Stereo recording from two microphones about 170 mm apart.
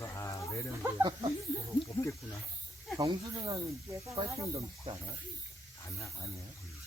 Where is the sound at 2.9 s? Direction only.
20° right (ahead or behind).